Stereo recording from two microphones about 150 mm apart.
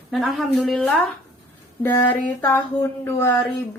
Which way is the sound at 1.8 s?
15° left (ahead or behind).